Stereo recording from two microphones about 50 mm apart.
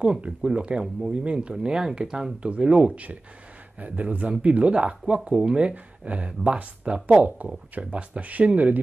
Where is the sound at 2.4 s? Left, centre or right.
Right.